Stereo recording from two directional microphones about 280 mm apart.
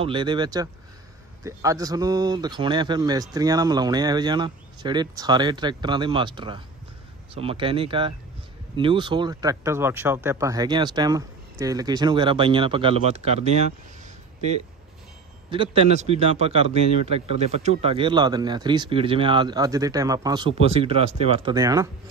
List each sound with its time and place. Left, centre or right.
0.0 s speech: centre
15.5 s speech: centre